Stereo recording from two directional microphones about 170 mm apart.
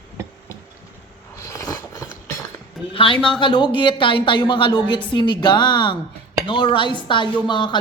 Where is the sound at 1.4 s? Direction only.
15° left (ahead or behind).